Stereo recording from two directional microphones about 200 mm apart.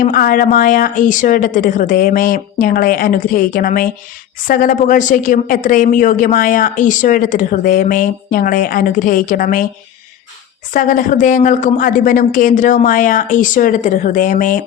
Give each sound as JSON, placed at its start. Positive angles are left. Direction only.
{"t": 0.0, "sound": "speech", "side_deg": 45}
{"t": 10.7, "sound": "speech", "side_deg": 40}